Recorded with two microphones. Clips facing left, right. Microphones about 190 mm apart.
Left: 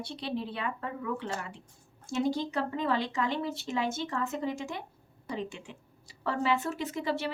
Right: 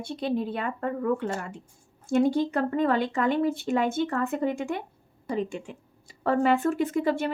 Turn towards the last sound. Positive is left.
turn(degrees=-50)  # may be behind; listen again after turning